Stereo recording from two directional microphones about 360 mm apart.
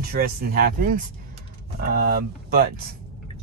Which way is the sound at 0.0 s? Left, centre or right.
Right.